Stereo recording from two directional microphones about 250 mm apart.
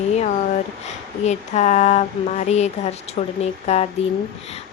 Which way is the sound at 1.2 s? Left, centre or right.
Left.